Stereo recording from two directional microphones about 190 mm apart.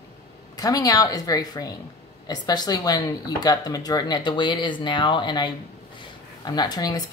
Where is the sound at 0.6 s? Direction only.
20° left (ahead or behind).